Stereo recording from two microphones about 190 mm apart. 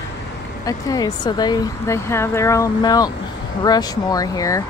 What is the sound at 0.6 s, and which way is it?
Speech, 20° left (ahead or behind).